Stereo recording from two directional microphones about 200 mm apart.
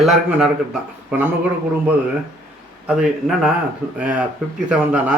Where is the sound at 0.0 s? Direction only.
5° right (ahead or behind).